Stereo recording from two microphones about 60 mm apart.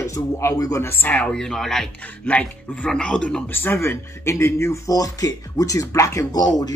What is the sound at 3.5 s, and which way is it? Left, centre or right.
Speech, left.